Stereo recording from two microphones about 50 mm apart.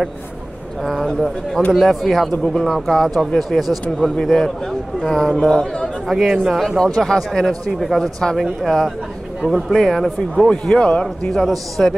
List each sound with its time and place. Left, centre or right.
0.8 s speech: centre
5.3 s speech: centre
10.5 s speech: centre
11.4 s speech: centre